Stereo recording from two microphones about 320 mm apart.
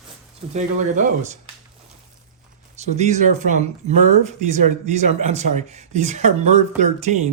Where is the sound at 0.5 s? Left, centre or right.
Right.